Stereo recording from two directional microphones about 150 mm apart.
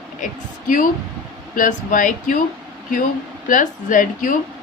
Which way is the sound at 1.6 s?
60° left (ahead or behind).